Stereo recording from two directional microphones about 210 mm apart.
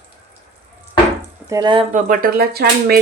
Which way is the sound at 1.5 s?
20° right (ahead or behind).